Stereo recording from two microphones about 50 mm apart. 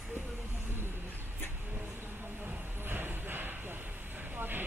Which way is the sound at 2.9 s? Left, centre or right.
Right.